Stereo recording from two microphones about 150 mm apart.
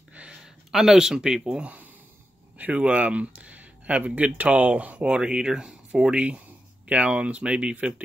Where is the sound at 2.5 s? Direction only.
10° right (ahead or behind).